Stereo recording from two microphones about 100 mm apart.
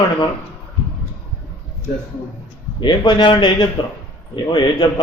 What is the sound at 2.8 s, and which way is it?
Speech, 50° left (ahead or behind).